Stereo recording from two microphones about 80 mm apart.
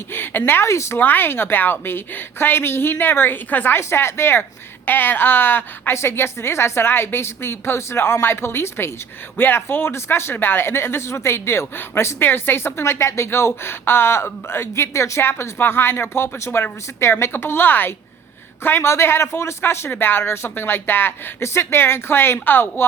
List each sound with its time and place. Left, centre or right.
0.1 s speech: left
0.9 s speech: left